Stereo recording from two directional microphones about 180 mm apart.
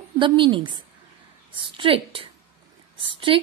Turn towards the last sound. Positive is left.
turn(degrees=-30)  # may be behind; listen again after turning